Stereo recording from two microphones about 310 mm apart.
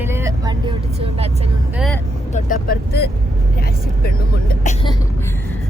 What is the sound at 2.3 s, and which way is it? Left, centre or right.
Speech, left.